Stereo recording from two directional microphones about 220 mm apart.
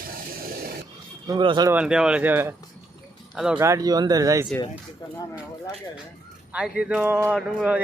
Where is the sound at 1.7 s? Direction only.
5° right (ahead or behind).